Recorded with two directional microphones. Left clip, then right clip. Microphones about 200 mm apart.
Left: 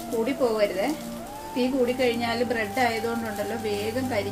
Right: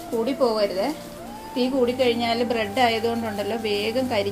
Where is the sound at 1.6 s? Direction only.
20° right (ahead or behind).